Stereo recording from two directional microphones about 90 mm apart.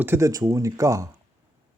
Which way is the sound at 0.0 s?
25° right (ahead or behind).